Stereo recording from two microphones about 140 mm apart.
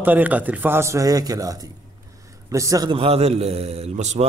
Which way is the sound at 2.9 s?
45° right (ahead or behind).